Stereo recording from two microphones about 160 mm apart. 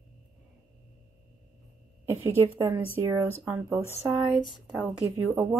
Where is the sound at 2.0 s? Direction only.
15° right (ahead or behind).